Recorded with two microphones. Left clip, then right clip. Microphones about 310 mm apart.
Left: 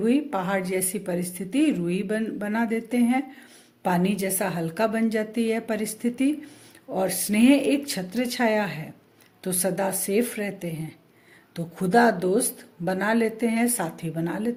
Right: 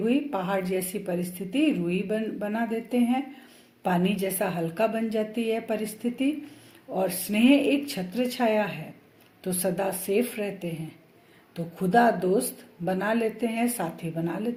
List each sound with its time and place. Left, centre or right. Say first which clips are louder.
0.0 s a woman's voice: left 2 dB; left
7.4 s a woman's voice: left 1 dB; left